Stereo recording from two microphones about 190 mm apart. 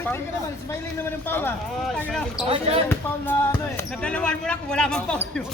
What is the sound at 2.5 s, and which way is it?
Speech, 30° right (ahead or behind).